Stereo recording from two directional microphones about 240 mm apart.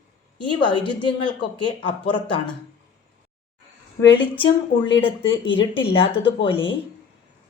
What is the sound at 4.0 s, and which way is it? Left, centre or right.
A woman's voice, left.